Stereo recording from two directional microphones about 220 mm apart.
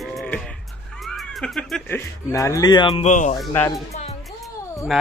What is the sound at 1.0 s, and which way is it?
Speech, centre (ahead or behind).